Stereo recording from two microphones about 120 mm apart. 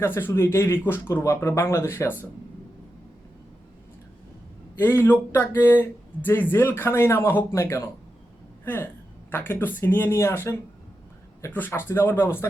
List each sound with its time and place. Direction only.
0.0 s speech: 20° left (ahead or behind)
4.8 s speech: 20° left (ahead or behind)